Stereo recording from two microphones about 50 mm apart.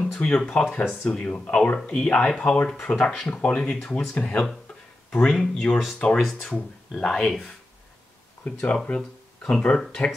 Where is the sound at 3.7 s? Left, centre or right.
Centre.